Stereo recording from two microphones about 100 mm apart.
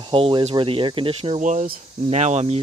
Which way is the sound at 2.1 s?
90° right.